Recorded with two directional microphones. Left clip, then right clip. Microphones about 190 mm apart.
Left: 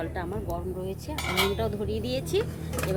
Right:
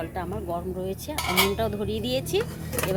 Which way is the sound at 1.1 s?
60° right (ahead or behind).